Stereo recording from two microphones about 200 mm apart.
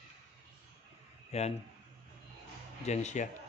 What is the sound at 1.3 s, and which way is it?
Speech, 30° left (ahead or behind).